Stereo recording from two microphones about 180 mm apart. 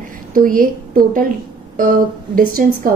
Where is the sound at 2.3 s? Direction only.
50° right (ahead or behind).